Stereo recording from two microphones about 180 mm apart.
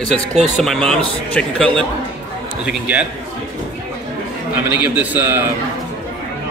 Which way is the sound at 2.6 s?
5° right (ahead or behind).